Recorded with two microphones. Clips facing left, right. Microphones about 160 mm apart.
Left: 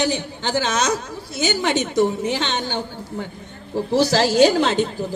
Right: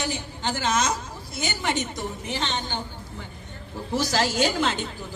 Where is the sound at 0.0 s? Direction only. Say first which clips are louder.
Left 7 dB; 75° left (ahead or behind).